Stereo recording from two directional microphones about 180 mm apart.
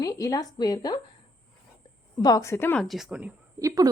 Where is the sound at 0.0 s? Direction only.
20° left (ahead or behind).